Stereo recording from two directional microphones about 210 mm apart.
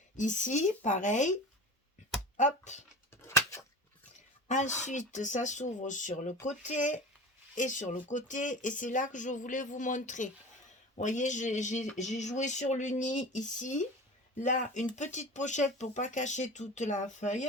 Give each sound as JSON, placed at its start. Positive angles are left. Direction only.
{"t": 0.2, "sound": "speech", "side_deg": 35}
{"t": 2.4, "sound": "speech", "side_deg": 35}
{"t": 3.2, "sound": "a sound", "side_deg": 15}
{"t": 4.4, "sound": "speech", "side_deg": 35}